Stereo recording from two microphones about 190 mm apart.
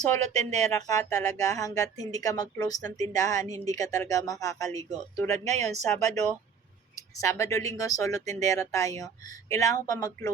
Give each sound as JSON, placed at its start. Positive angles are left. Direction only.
{"t": 0.2, "sound": "speech", "side_deg": -35}
{"t": 0.9, "sound": "speech", "side_deg": 15}
{"t": 5.5, "sound": "speech", "side_deg": -35}
{"t": 7.2, "sound": "speech", "side_deg": 15}